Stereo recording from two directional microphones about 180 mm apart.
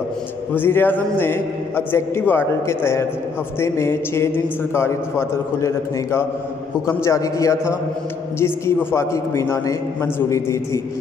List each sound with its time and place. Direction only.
0.6 s a man's voice: 10° left (ahead or behind)